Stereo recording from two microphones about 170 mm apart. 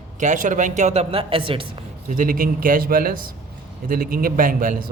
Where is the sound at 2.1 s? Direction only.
55° right (ahead or behind).